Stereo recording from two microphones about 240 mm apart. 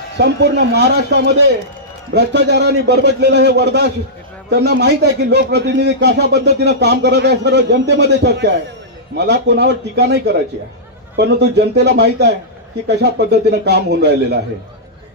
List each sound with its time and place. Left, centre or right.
0.2 s a man's voice: right